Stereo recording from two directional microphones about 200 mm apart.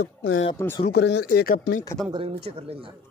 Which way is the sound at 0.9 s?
60° left (ahead or behind).